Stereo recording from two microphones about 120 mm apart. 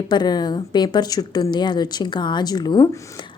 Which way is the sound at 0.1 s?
35° left (ahead or behind).